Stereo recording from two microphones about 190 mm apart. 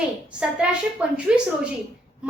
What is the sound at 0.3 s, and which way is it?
Speech, 5° right (ahead or behind).